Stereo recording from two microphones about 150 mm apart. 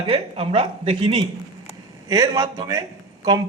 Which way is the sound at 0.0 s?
40° right (ahead or behind).